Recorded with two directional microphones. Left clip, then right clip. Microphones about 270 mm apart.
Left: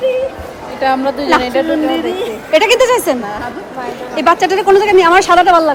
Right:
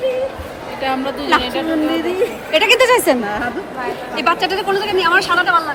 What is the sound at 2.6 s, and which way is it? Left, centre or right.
Speech, centre.